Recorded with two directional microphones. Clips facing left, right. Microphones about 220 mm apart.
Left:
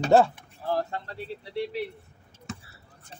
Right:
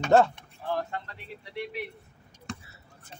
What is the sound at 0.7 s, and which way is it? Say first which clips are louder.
Speech: left 3 dB; 35° left (ahead or behind).